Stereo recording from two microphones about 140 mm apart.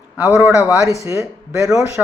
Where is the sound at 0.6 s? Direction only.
25° left (ahead or behind).